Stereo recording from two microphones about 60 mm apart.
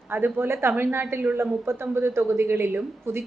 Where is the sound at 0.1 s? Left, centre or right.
Right.